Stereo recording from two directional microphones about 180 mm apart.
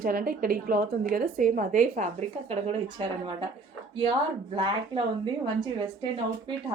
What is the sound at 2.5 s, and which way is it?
Speech, 35° right (ahead or behind).